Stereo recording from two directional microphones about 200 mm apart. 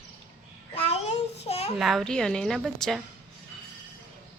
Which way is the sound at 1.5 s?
30° left (ahead or behind).